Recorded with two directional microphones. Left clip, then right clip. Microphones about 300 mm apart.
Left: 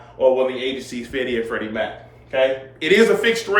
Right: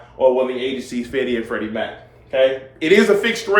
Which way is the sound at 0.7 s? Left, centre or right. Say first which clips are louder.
Right 3 dB; centre.